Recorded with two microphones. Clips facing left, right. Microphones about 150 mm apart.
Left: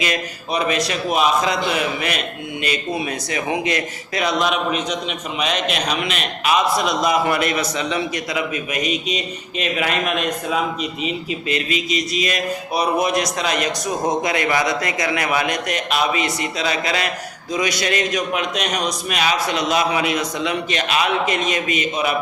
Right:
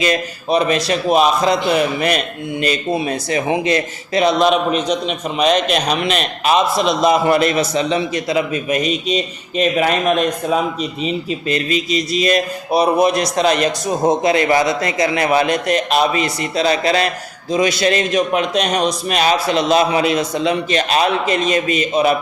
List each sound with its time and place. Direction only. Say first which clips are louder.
0.0 s speech: right 5 dB; 35° right (ahead or behind)